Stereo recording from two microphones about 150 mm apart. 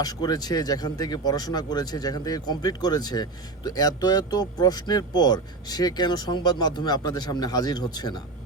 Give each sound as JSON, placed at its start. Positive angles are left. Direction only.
{"t": 0.0, "sound": "speech", "side_deg": 25}